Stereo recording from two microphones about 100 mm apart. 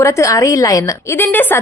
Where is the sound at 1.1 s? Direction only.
20° left (ahead or behind).